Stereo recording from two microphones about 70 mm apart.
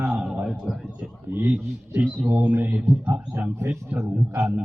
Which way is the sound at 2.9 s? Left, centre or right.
Centre.